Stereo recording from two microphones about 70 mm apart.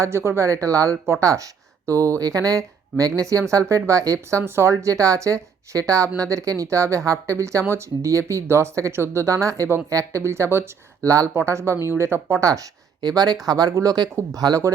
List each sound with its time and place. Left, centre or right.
0.0 s speech: right
13.0 s speech: right